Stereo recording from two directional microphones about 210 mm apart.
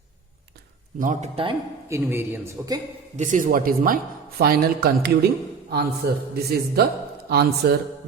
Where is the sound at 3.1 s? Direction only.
35° right (ahead or behind).